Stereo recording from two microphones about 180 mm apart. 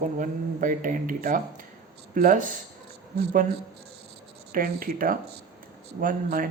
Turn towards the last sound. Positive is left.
turn(degrees=-50)  # may be behind; listen again after turning